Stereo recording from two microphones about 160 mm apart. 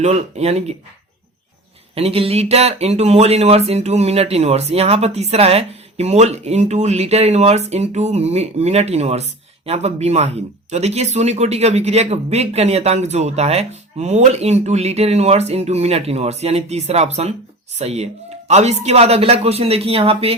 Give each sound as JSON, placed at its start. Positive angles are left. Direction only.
{"t": 0.0, "sound": "speech", "side_deg": -45}
{"t": 2.0, "sound": "speech", "side_deg": -40}